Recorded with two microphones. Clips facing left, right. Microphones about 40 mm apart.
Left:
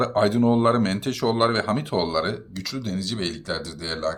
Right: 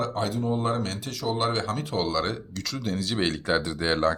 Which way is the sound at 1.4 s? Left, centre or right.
Left.